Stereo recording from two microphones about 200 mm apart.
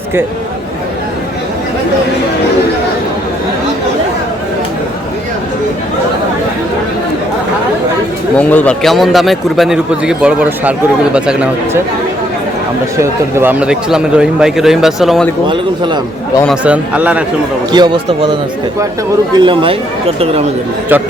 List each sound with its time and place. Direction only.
8.4 s a man's voice: 5° left (ahead or behind)
13.0 s a man's voice: 10° right (ahead or behind)
16.6 s a man's voice: 5° right (ahead or behind)
17.7 s speech: 20° right (ahead or behind)
20.9 s a man's voice: 10° right (ahead or behind)